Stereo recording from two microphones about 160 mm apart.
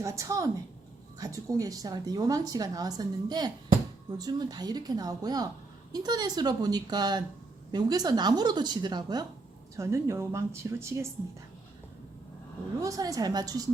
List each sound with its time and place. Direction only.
0.0 s a woman's voice: 20° right (ahead or behind)
12.8 s a woman's voice: 20° right (ahead or behind)